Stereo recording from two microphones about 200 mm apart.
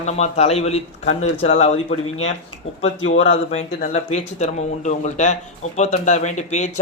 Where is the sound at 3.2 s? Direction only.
35° left (ahead or behind).